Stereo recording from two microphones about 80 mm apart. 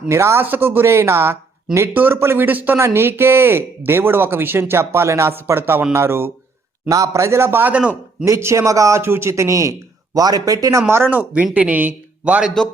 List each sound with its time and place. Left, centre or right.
0.1 s speech: right
2.7 s speech: right
6.8 s speech: right; by 7.9 s centre
8.2 s speech: right
10.2 s a man's voice: right; by 12.5 s centre